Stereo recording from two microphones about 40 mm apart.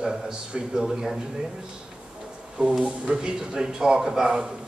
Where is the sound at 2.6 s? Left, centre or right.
Centre.